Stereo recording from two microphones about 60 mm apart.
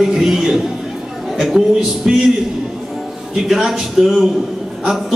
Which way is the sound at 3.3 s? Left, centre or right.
Centre.